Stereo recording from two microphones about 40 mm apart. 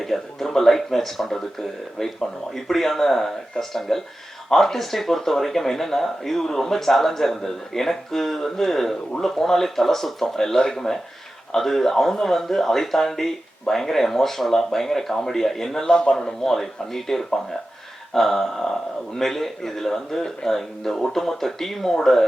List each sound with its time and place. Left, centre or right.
0.0 s speech: centre
2.6 s speech: centre
15.9 s a man's voice: left
16.4 s speech: centre